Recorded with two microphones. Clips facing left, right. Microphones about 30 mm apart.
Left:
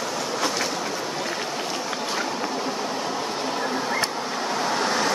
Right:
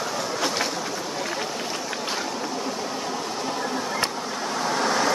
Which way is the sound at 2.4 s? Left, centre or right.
Centre.